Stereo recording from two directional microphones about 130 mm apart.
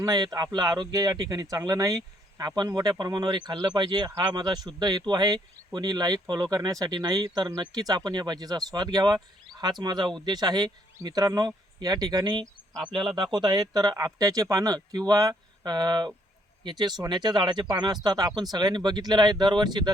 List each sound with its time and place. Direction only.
0.0 s speech: 30° right (ahead or behind)